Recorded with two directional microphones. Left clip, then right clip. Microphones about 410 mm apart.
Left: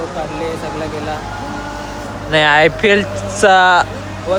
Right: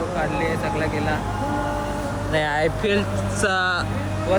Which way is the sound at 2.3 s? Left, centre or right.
Left.